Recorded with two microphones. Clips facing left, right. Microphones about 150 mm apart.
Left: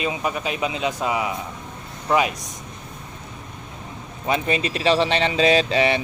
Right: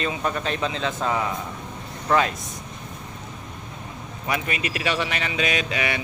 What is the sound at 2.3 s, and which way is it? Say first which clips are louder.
Speech: even; 40° left (ahead or behind).